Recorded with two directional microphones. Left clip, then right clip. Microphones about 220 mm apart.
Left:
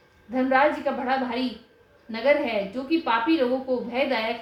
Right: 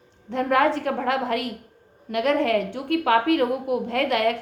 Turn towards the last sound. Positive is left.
turn(degrees=-40)  # may be behind; listen again after turning